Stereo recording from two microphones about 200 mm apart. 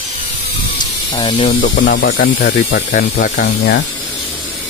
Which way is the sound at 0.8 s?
20° left (ahead or behind).